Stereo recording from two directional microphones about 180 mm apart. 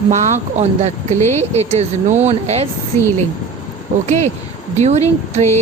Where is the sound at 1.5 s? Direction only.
35° right (ahead or behind).